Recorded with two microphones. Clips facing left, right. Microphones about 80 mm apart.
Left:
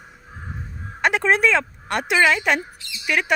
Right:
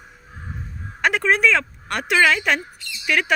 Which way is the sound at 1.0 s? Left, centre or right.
Left.